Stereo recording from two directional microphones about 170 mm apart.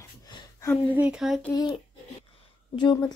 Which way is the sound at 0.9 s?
5° right (ahead or behind).